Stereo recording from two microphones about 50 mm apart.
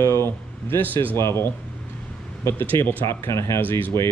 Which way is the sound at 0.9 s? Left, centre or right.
Left.